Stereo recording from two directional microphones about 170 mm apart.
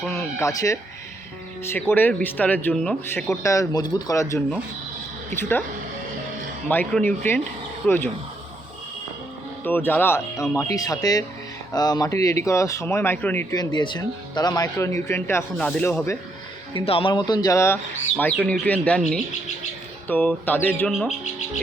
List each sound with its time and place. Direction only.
0.1 s speech: 15° left (ahead or behind)
3.4 s speech: 20° left (ahead or behind)
6.7 s speech: 10° left (ahead or behind)
9.6 s speech: 10° left (ahead or behind)
13.6 s speech: 25° left (ahead or behind)
16.8 s speech: 35° left (ahead or behind); by 20.9 s 10° left (ahead or behind)